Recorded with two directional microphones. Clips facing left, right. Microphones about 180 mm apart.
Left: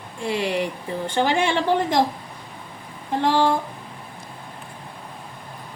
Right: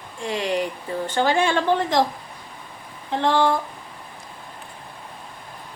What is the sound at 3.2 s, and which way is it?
Speech, 10° left (ahead or behind).